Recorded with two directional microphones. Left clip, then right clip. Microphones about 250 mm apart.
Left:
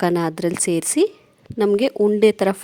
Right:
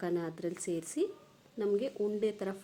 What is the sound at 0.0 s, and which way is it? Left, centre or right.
A woman's voice, left.